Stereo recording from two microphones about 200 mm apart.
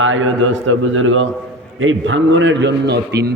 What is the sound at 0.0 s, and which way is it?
A man's voice, 75° right (ahead or behind).